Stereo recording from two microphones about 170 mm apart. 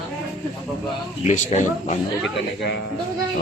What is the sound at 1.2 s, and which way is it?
Speech, 45° left (ahead or behind).